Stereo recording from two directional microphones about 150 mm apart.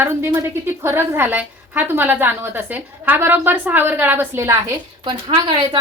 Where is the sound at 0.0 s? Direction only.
15° right (ahead or behind).